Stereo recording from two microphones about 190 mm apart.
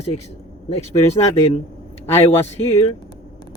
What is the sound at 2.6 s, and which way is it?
Speech, 30° left (ahead or behind).